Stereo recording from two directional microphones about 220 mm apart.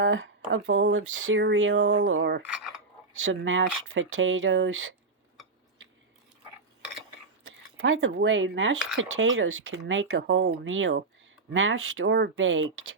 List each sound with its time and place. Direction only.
0.0 s speech: 60° right (ahead or behind)
7.8 s speech: 60° right (ahead or behind)